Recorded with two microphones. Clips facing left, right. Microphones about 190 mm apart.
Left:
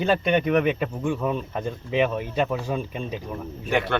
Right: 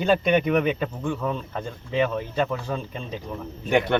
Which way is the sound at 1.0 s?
15° left (ahead or behind).